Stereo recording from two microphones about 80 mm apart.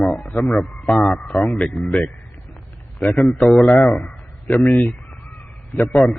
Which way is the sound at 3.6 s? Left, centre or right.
Centre.